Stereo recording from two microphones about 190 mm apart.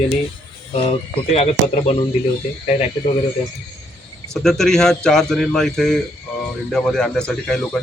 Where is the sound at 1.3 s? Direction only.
35° left (ahead or behind).